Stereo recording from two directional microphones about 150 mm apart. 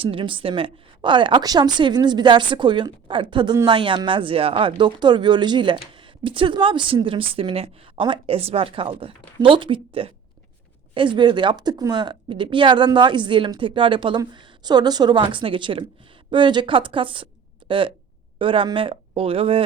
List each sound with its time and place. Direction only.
0.0 s speech: 35° right (ahead or behind)